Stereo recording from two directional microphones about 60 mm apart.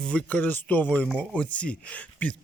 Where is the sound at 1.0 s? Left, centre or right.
Centre.